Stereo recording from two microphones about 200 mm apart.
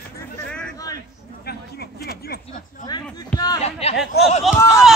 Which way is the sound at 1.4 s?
50° left (ahead or behind).